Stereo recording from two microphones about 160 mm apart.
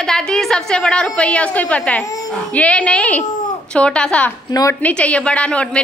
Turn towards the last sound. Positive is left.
turn(degrees=5)  # may be behind; listen again after turning